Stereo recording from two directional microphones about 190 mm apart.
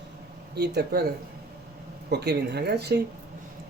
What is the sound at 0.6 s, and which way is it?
Speech, 60° right (ahead or behind).